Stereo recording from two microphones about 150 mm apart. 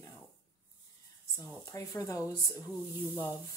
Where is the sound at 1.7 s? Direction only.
20° left (ahead or behind).